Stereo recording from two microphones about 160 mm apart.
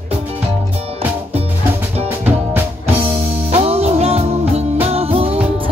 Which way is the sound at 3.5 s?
40° right (ahead or behind).